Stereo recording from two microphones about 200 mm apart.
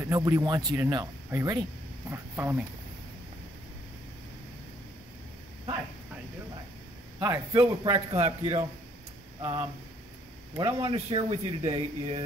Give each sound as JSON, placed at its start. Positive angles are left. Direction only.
{"t": 0.0, "sound": "speech", "side_deg": -15}
{"t": 7.2, "sound": "speech", "side_deg": -15}
{"t": 7.8, "sound": "speech", "side_deg": -25}